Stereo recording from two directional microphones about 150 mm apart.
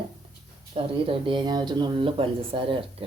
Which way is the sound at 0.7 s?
40° right (ahead or behind).